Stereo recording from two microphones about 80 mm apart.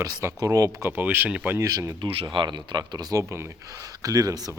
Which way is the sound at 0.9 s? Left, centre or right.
Right.